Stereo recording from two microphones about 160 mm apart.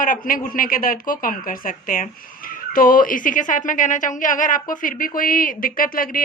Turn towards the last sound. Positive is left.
turn(degrees=60)  # may be behind; listen again after turning